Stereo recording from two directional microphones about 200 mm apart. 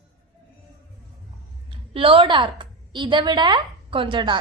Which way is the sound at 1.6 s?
25° right (ahead or behind).